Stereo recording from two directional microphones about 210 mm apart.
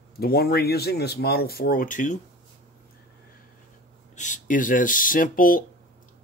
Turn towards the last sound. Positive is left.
turn(degrees=40)  # may be behind; listen again after turning